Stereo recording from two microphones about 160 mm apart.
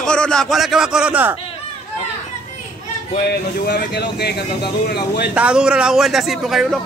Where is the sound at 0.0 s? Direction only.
5° left (ahead or behind).